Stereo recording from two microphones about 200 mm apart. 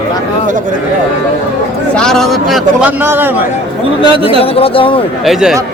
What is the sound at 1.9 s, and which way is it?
Speech, centre (ahead or behind).